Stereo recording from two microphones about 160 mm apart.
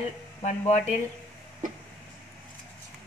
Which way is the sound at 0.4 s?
45° left (ahead or behind).